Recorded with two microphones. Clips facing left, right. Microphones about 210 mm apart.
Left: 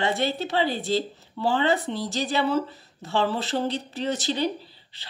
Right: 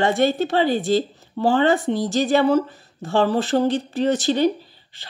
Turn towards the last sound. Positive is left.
turn(degrees=-50)  # may be behind; listen again after turning